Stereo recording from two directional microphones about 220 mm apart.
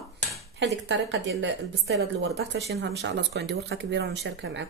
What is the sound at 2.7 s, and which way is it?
A woman's voice, 50° right (ahead or behind).